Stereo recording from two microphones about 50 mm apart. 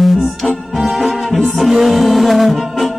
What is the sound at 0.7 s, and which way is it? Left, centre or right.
Music, centre.